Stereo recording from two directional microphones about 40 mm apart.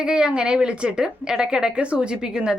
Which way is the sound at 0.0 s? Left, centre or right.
Right.